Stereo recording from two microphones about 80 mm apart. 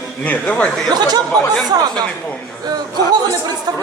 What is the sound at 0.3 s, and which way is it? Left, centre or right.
Speech, centre.